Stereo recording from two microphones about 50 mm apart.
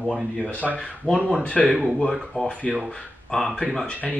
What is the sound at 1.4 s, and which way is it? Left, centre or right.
Speech, left.